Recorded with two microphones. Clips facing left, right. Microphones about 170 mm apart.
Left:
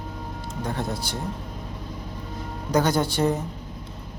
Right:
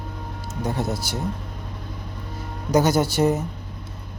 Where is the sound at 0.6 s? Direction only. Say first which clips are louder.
Right 3 dB; 10° right (ahead or behind).